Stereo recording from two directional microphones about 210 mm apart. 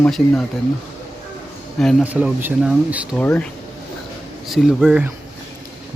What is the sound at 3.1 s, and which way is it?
Speech, 5° left (ahead or behind).